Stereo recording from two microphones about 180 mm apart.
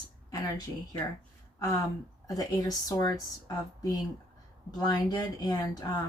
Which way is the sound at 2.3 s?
20° left (ahead or behind).